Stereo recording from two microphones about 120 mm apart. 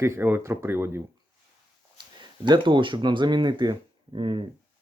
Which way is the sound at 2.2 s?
40° right (ahead or behind).